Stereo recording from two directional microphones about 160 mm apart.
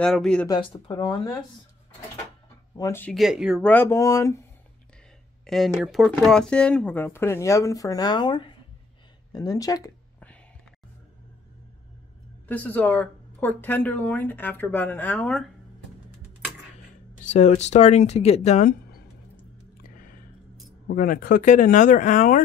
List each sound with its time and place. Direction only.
0.0 s speech: 5° left (ahead or behind)
0.5 s speech: 30° left (ahead or behind)
2.8 s speech: 15° left (ahead or behind)
3.1 s speech: centre (ahead or behind)
3.6 s speech: 10° left (ahead or behind)
5.5 s speech: centre (ahead or behind); by 9.9 s 20° left (ahead or behind)
12.4 s speech: 10° left (ahead or behind)
17.2 s speech: 50° left (ahead or behind)
20.9 s speech: 60° left (ahead or behind)